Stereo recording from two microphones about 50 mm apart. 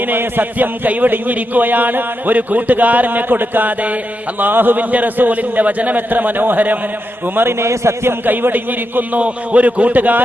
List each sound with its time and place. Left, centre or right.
0.1 s a man's voice: right
7.3 s a man's voice: right
7.7 s a man's voice: right
8.3 s a man's voice: right